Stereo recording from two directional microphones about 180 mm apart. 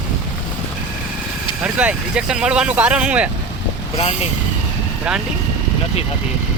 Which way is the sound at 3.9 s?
35° left (ahead or behind).